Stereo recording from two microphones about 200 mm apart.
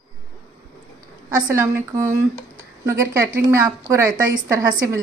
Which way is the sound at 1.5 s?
15° right (ahead or behind).